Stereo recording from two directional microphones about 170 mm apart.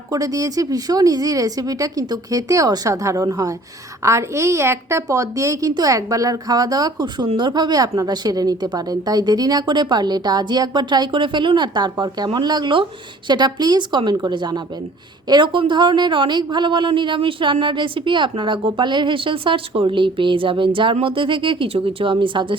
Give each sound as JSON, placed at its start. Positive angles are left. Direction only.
{"t": 0.1, "sound": "a woman's voice", "side_deg": -20}